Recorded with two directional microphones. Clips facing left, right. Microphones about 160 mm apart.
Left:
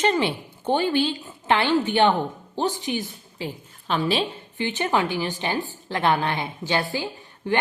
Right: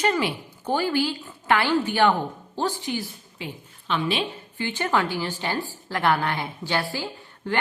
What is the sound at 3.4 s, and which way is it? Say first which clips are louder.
Speech: left 4 dB; 35° left (ahead or behind).